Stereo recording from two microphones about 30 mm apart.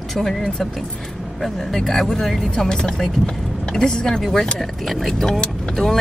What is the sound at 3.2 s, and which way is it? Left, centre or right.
Speech, centre.